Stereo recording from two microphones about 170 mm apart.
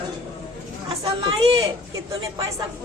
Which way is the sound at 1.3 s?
30° right (ahead or behind).